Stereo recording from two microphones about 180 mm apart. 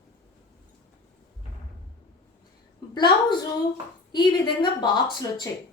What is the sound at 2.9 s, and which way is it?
A woman's voice, 25° left (ahead or behind).